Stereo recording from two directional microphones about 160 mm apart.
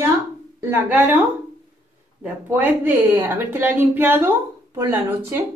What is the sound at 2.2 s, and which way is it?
A woman's voice, 10° right (ahead or behind).